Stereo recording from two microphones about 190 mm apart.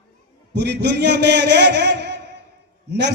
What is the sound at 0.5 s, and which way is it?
A man's voice, 60° right (ahead or behind).